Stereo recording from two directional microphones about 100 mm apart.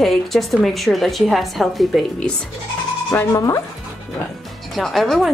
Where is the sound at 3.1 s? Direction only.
20° left (ahead or behind).